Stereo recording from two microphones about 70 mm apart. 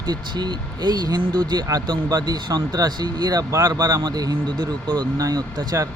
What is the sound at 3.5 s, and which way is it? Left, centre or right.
Speech, right.